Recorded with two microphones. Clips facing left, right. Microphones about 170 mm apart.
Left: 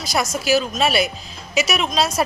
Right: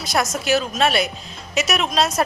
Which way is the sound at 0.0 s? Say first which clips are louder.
Even; centre (ahead or behind).